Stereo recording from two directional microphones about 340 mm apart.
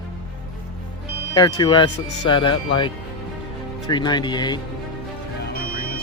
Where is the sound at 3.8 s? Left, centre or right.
Centre.